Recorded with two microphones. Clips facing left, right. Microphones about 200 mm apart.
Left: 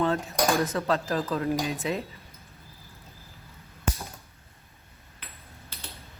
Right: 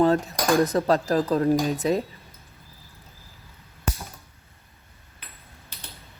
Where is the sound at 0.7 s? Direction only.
35° right (ahead or behind).